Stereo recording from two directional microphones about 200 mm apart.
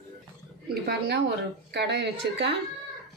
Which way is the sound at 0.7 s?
55° right (ahead or behind).